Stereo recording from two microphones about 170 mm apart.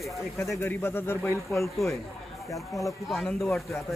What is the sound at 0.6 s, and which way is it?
Speech, 15° left (ahead or behind).